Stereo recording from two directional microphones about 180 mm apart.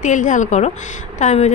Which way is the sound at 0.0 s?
45° left (ahead or behind).